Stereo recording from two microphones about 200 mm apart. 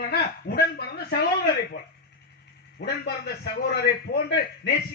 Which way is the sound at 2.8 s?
55° left (ahead or behind).